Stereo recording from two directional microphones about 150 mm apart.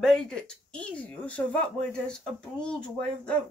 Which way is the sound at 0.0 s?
5° left (ahead or behind).